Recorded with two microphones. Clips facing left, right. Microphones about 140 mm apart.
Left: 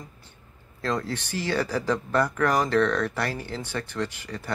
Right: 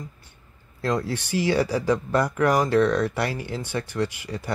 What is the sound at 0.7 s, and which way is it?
Speech, 10° right (ahead or behind).